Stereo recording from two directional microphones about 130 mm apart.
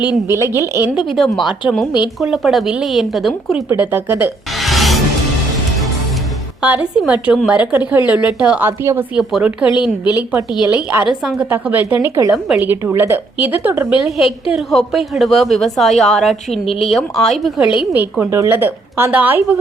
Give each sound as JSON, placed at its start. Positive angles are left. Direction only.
{"t": 0.3, "sound": "a woman's voice", "side_deg": -20}
{"t": 0.9, "sound": "a woman's voice", "side_deg": 0}
{"t": 3.7, "sound": "a woman's voice", "side_deg": -15}
{"t": 4.6, "sound": "music", "side_deg": 0}
{"t": 6.6, "sound": "a woman's voice", "side_deg": -10}
{"t": 10.0, "sound": "a woman's voice", "side_deg": 30}
{"t": 10.7, "sound": "a woman's voice", "side_deg": -10}
{"t": 12.3, "sound": "a woman's voice", "side_deg": -5}
{"t": 12.7, "sound": "a woman's voice", "side_deg": -20}
{"t": 14.5, "sound": "a woman's voice", "side_deg": 0}
{"t": 17.7, "sound": "a woman's voice", "side_deg": -15}